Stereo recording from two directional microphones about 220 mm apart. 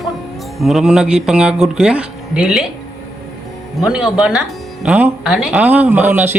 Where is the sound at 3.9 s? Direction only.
5° right (ahead or behind).